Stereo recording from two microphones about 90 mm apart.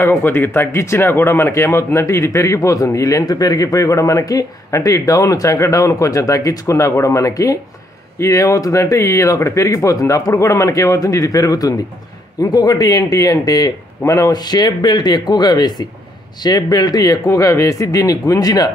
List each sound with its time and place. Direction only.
0.0 s a man's voice: 25° left (ahead or behind); by 18.7 s 45° left (ahead or behind)